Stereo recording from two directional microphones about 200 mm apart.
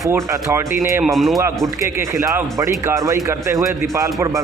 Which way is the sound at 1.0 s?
Centre (ahead or behind).